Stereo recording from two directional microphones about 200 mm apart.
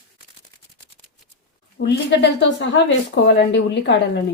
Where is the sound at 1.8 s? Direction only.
60° left (ahead or behind).